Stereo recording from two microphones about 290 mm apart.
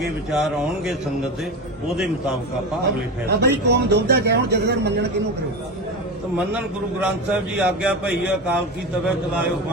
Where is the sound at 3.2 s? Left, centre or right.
Right.